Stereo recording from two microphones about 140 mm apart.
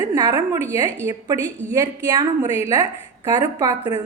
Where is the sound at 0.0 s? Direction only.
25° right (ahead or behind).